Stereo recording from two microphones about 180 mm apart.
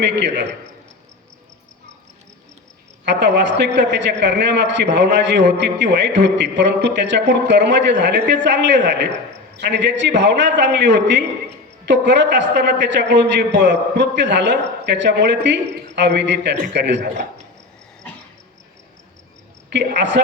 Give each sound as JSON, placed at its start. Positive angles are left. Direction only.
{"t": 0.0, "sound": "a man's voice", "side_deg": -75}
{"t": 3.0, "sound": "a man's voice", "side_deg": -75}
{"t": 19.7, "sound": "a man's voice", "side_deg": -75}